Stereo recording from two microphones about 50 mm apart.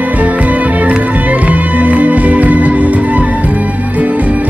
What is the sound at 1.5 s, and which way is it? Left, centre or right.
Music, right.